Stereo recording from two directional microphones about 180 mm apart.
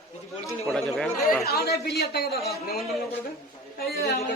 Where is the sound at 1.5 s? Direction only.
60° left (ahead or behind).